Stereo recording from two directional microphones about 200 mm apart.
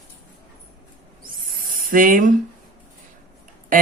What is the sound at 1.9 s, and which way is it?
Speech, 45° right (ahead or behind).